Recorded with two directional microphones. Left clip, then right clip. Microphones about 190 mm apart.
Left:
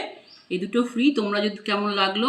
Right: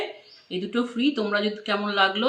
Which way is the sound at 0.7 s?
20° right (ahead or behind).